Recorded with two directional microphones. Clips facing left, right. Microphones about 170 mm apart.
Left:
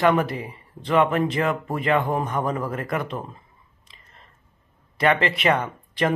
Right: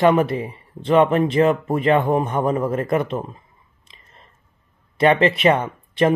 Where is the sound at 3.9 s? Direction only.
15° right (ahead or behind).